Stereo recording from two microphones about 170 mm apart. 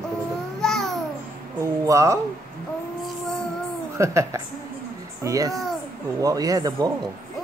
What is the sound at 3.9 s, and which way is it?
Speech, 15° right (ahead or behind).